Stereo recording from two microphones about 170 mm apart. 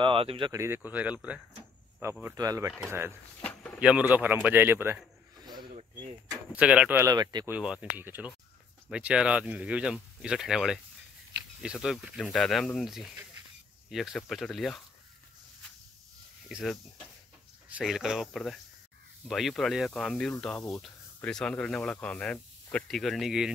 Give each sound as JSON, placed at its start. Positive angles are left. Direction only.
{"t": 0.0, "sound": "speech", "side_deg": -35}
{"t": 0.5, "sound": "a man's voice", "side_deg": -15}
{"t": 6.5, "sound": "speech", "side_deg": -5}
{"t": 7.4, "sound": "speech", "side_deg": -5}
{"t": 16.4, "sound": "speech", "side_deg": 0}
{"t": 17.7, "sound": "speech", "side_deg": -5}